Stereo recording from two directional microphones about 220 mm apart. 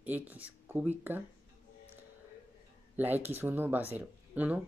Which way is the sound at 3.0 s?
10° right (ahead or behind).